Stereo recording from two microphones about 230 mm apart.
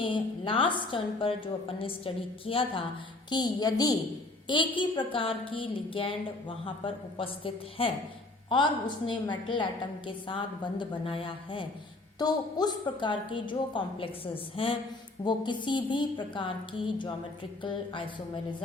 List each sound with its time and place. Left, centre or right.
0.0 s a woman's voice: left